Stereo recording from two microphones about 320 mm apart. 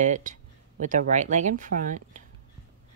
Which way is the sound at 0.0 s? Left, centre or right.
Right.